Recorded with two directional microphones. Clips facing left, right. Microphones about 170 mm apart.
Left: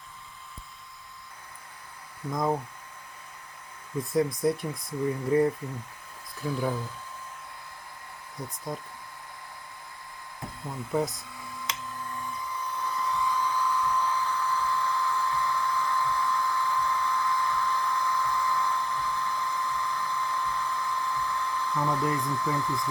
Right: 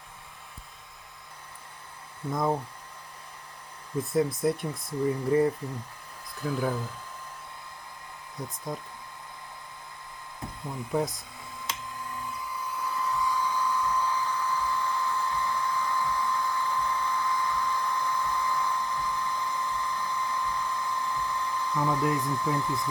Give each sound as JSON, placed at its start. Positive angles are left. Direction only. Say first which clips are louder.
{"t": 2.3, "sound": "speech", "louder": "even", "side_deg": -5}
{"t": 4.1, "sound": "speech", "louder": "left 1 dB", "side_deg": 0}
{"t": 8.4, "sound": "speech", "louder": "even", "side_deg": 0}
{"t": 10.9, "sound": "speech", "louder": "even", "side_deg": 0}
{"t": 12.8, "sound": "hair dryer", "louder": "even", "side_deg": -5}
{"t": 22.1, "sound": "speech", "louder": "right 1 dB", "side_deg": -20}